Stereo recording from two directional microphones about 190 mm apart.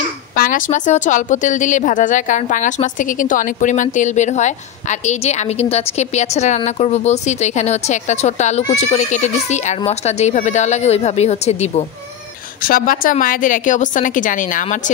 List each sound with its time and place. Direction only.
0.4 s a woman's voice: 45° left (ahead or behind)
12.6 s a woman's voice: 50° left (ahead or behind)